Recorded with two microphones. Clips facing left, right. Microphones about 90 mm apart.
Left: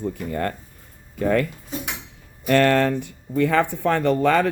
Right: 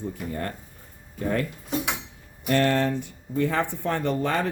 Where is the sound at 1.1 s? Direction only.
90° left.